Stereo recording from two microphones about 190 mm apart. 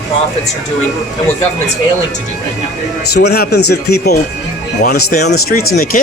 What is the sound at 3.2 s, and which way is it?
Speech, 60° left (ahead or behind).